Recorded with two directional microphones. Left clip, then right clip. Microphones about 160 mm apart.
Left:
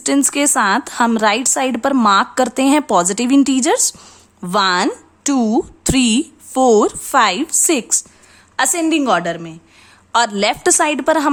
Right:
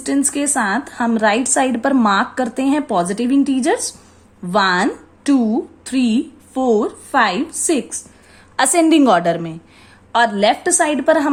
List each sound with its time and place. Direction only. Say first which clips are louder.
0.0 s a woman's voice: left 3 dB; 35° left (ahead or behind)
8.5 s a woman's voice: right 3 dB; 5° left (ahead or behind)
10.1 s a woman's voice: right 1 dB; 30° left (ahead or behind)